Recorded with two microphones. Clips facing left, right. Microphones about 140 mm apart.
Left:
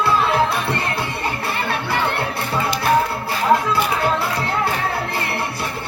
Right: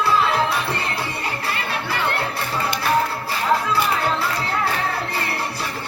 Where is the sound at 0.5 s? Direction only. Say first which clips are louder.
Left 2 dB; 55° left (ahead or behind).